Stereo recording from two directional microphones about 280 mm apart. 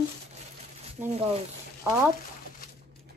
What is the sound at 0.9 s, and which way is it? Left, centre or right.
Speech, right.